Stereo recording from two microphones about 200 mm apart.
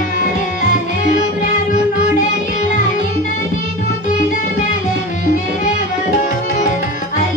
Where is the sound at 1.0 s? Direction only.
40° left (ahead or behind).